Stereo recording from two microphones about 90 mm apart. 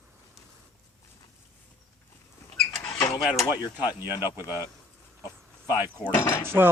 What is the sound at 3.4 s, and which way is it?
Speech, 40° left (ahead or behind).